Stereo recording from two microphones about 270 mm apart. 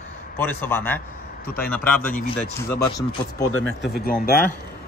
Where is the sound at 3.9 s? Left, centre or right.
Left.